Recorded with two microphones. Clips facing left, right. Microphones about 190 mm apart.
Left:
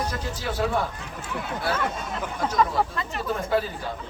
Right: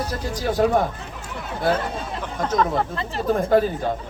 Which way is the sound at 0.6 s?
45° right (ahead or behind).